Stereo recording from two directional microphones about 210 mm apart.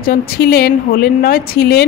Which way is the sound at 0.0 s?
45° left (ahead or behind).